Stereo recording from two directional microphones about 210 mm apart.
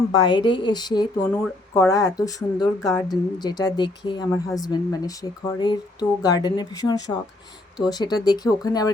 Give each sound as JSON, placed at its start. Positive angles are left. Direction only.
{"t": 0.3, "sound": "a woman's voice", "side_deg": 20}